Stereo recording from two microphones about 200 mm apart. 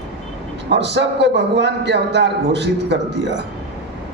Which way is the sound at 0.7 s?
60° right (ahead or behind).